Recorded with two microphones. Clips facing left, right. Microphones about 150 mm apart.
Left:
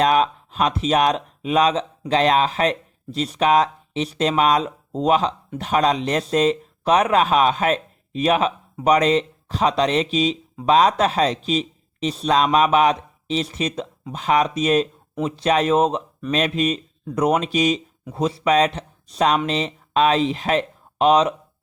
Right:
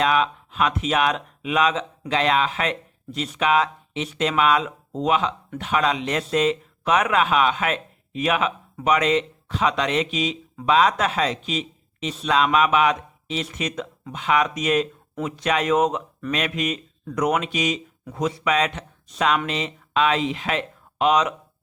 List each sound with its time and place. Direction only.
0.0 s speech: 40° left (ahead or behind)